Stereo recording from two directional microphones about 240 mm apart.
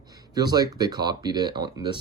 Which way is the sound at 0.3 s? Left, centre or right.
Centre.